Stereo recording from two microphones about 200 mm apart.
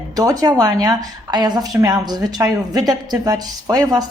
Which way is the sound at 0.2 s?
20° right (ahead or behind).